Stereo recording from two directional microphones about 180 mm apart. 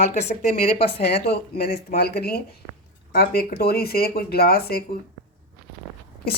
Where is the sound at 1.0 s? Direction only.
65° left (ahead or behind).